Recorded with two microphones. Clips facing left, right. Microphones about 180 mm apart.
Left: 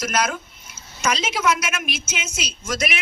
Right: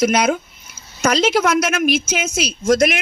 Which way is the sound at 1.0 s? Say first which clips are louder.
Right 8 dB; 35° right (ahead or behind).